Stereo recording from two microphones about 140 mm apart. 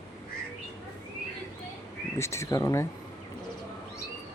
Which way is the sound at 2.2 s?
20° left (ahead or behind).